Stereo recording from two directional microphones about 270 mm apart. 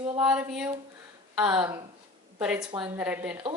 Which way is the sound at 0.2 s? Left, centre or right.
Centre.